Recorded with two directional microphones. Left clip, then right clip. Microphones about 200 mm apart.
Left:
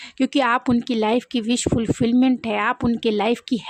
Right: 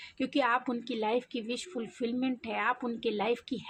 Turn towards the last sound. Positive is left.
turn(degrees=50)  # may be behind; listen again after turning